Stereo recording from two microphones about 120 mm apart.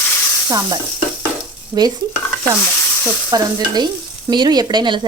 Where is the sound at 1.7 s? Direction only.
30° right (ahead or behind).